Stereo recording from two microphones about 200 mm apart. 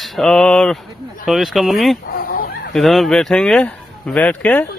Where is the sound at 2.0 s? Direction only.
50° left (ahead or behind).